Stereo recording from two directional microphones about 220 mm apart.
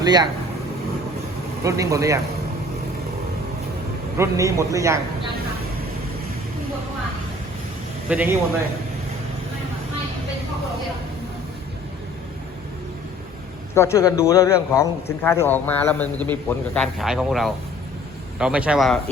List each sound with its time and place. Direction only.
0.0 s speech: 20° right (ahead or behind)
1.6 s a man's voice: 15° right (ahead or behind)
4.2 s a man's voice: 15° right (ahead or behind)
8.1 s a man's voice: 10° right (ahead or behind)
13.7 s a man's voice: 10° left (ahead or behind)